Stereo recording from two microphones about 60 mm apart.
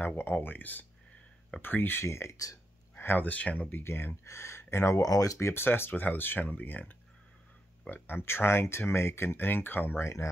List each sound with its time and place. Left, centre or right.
0.0 s speech: left
2.0 s speech: left
3.0 s a sound: left
3.3 s speech: left
3.7 s speech: left
5.0 s speech: left
5.4 s speech: left
8.2 s speech: left